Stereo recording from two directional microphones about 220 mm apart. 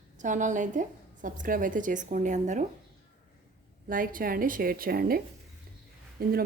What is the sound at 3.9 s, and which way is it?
Speech, 40° right (ahead or behind).